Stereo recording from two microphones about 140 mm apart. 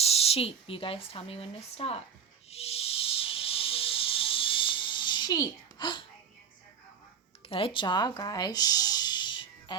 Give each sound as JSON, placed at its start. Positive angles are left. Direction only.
{"t": 0.0, "sound": "speech", "side_deg": 45}
{"t": 2.5, "sound": "music", "side_deg": 45}
{"t": 7.4, "sound": "a sound", "side_deg": 40}